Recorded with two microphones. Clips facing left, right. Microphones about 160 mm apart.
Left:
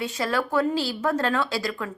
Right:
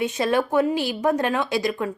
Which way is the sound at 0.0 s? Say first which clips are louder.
Right 5 dB; 20° right (ahead or behind).